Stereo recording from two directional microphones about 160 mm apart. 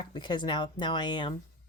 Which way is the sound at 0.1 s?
30° left (ahead or behind).